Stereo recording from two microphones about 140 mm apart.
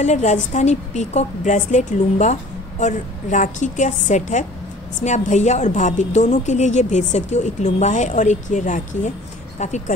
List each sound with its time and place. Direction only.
0.0 s a woman's voice: 55° left (ahead or behind)